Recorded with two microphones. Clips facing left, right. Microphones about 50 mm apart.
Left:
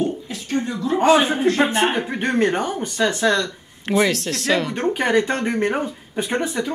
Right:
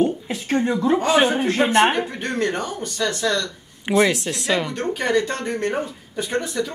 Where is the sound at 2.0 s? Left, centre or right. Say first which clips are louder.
Left 4 dB; left.